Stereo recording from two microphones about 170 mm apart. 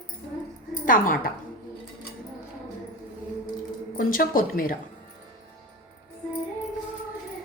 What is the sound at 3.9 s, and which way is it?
Speech, 55° left (ahead or behind).